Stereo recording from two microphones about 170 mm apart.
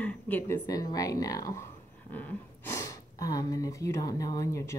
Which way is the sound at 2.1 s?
10° left (ahead or behind).